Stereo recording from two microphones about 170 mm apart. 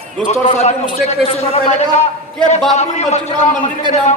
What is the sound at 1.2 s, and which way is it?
A man's voice, 35° left (ahead or behind).